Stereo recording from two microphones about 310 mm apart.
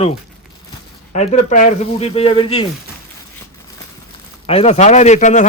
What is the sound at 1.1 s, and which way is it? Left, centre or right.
A man's voice, left.